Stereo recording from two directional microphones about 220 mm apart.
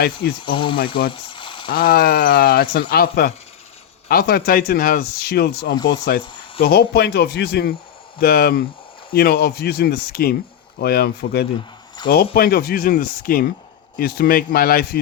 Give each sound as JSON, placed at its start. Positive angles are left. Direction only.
{"t": 0.2, "sound": "speech", "side_deg": 20}
{"t": 1.1, "sound": "frying", "side_deg": 20}
{"t": 1.7, "sound": "speech", "side_deg": 45}